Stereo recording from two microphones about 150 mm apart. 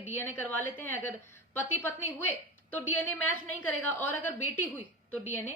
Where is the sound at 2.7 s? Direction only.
10° left (ahead or behind).